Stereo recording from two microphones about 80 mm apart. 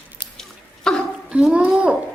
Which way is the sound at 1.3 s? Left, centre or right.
Centre.